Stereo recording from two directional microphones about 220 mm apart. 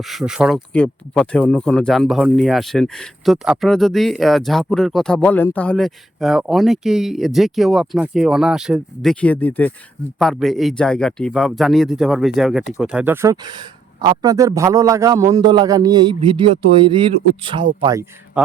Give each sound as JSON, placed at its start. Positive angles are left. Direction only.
{"t": 0.0, "sound": "speech", "side_deg": 0}